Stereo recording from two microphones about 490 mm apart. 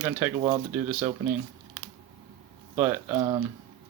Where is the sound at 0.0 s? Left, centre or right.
Centre.